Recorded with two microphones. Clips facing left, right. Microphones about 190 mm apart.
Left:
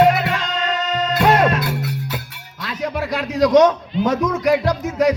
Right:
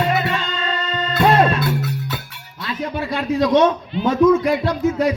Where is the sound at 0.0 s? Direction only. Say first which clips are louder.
Left 5 dB; 80° left.